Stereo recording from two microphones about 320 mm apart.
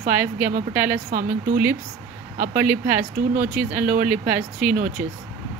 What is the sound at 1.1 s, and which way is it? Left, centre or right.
Speech, right.